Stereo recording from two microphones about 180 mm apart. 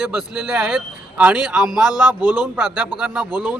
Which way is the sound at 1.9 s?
20° left (ahead or behind).